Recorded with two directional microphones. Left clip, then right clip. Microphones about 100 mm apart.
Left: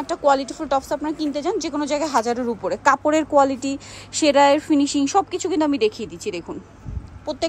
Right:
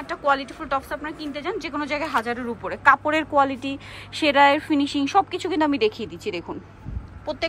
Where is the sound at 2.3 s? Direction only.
50° left (ahead or behind); by 6.5 s 30° left (ahead or behind).